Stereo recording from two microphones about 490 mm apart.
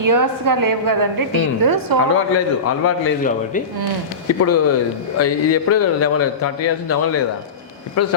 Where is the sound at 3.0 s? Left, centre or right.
Centre.